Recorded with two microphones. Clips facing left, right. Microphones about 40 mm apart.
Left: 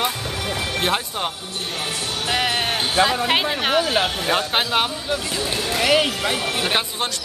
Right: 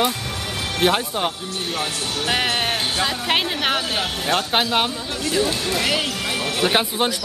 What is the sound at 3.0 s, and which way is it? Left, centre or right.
Speech, centre.